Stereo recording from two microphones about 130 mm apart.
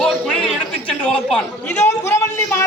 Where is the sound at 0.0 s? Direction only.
10° left (ahead or behind).